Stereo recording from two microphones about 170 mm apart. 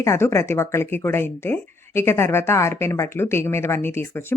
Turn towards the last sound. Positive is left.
turn(degrees=15)  # may be behind; listen again after turning